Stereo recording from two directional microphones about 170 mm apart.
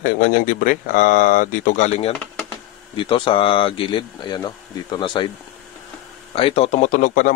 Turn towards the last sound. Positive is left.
turn(degrees=55)  # may be behind; listen again after turning